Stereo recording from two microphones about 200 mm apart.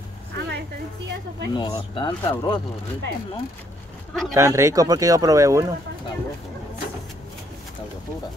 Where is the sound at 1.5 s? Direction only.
20° left (ahead or behind).